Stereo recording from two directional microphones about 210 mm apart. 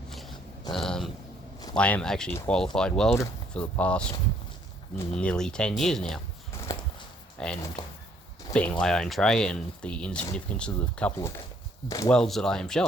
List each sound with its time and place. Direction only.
0.1 s grunt: centre (ahead or behind)
0.7 s a sound: centre (ahead or behind)
1.7 s speech: 5° left (ahead or behind)
7.3 s speech: 5° left (ahead or behind)
8.8 s speech: centre (ahead or behind)
12.1 s speech: 5° left (ahead or behind)